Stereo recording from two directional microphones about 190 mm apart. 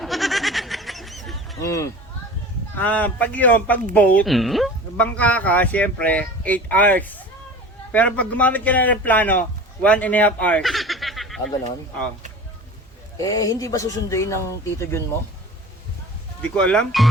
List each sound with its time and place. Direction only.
0.0 s goat: centre (ahead or behind)
1.6 s a man's voice: 15° left (ahead or behind); by 11.5 s centre (ahead or behind)
13.1 s speech: 20° left (ahead or behind)
16.4 s speech: 5° left (ahead or behind)